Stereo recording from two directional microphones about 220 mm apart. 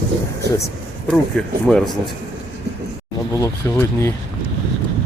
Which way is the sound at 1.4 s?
5° left (ahead or behind).